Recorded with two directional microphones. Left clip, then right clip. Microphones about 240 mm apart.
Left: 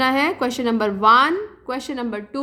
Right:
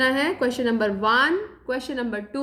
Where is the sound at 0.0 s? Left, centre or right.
Left.